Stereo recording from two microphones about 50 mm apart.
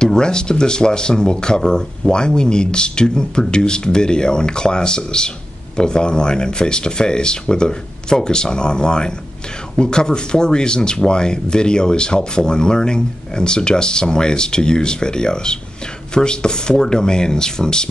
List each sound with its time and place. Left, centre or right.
0.0 s speech: centre